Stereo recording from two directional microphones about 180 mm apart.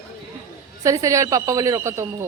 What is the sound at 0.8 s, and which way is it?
A woman's voice, 20° right (ahead or behind).